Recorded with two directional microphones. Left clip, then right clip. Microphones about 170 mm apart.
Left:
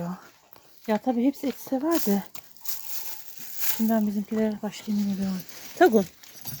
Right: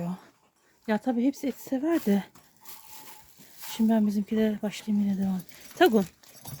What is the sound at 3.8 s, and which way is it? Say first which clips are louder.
Speech: even; 25° right (ahead or behind).